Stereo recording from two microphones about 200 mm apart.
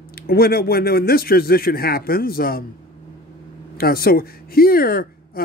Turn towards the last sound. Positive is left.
turn(degrees=45)  # may be behind; listen again after turning